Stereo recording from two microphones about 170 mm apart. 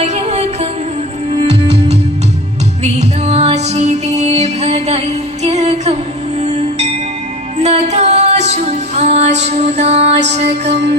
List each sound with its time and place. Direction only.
0.0 s music: 40° right (ahead or behind)
1.5 s music: 85° right
2.8 s music: 40° right (ahead or behind)
9.5 s mantra: 40° right (ahead or behind)
10.4 s music: 90° right